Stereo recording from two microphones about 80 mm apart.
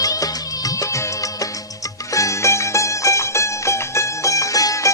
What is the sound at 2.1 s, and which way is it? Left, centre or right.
Music, left.